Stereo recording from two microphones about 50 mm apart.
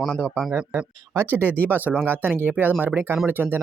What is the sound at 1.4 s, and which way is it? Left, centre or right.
Speech, left.